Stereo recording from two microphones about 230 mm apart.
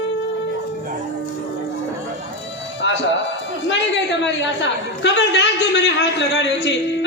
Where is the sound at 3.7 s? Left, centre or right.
Left.